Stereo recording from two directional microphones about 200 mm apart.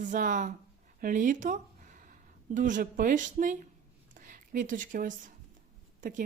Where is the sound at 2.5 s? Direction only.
40° right (ahead or behind).